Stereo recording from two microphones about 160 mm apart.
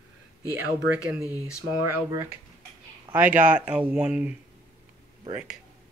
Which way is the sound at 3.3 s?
55° right (ahead or behind).